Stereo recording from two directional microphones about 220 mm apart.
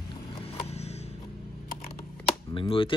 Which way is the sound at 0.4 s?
25° left (ahead or behind).